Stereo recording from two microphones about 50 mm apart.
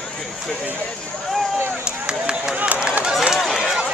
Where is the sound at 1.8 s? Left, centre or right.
Centre.